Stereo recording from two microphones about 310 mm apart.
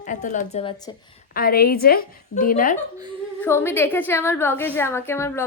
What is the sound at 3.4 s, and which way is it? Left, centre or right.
A woman's voice, centre.